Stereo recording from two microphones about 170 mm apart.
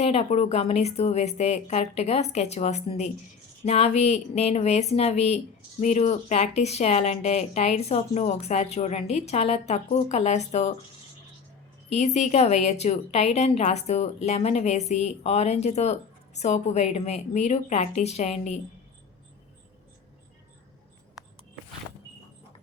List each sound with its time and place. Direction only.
0.0 s a woman's voice: 40° left (ahead or behind)
11.9 s a woman's voice: 40° left (ahead or behind)